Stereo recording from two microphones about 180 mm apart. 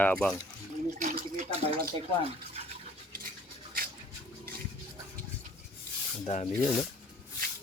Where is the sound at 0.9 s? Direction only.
45° right (ahead or behind).